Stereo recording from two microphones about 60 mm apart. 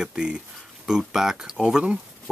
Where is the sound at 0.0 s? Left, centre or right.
Centre.